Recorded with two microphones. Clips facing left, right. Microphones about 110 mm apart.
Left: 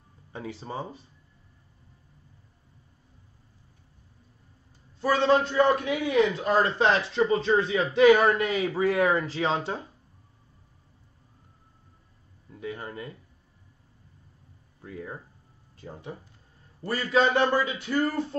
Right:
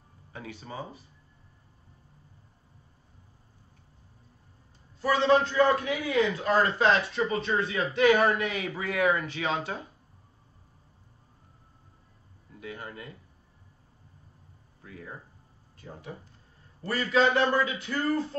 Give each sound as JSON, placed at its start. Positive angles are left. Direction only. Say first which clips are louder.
{"t": 0.3, "sound": "speech", "louder": "left 5 dB", "side_deg": 30}
{"t": 5.0, "sound": "a man's voice", "louder": "left 1 dB", "side_deg": 25}
{"t": 12.5, "sound": "speech", "louder": "left 4 dB", "side_deg": 25}
{"t": 14.8, "sound": "a sound", "louder": "left 6 dB", "side_deg": 30}
{"t": 16.8, "sound": "a man's voice", "louder": "left 1 dB", "side_deg": 20}